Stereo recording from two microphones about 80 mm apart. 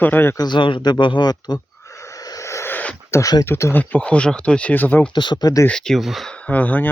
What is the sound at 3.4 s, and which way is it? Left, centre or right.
Speech, left.